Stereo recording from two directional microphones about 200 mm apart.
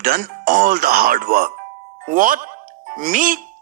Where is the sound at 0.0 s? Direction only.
45° right (ahead or behind).